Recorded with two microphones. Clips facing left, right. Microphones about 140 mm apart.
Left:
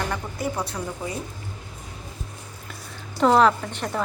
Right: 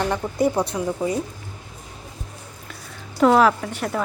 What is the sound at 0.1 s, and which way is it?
A woman's voice, 20° right (ahead or behind).